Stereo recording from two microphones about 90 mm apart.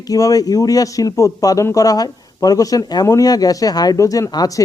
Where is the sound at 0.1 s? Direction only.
40° left (ahead or behind).